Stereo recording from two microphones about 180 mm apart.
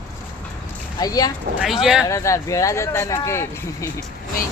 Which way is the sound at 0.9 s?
20° left (ahead or behind).